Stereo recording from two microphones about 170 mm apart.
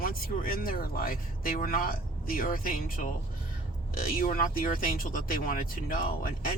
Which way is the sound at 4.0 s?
55° left (ahead or behind).